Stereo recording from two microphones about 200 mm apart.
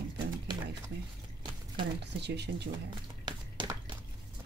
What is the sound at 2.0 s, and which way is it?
Speech, 60° right (ahead or behind).